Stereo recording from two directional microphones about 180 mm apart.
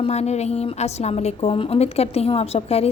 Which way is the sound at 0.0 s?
35° left (ahead or behind).